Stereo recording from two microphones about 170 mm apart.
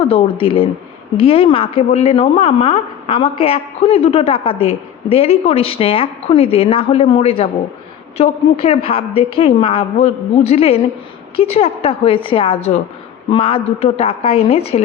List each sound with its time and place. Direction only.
0.0 s a woman's voice: 30° left (ahead or behind)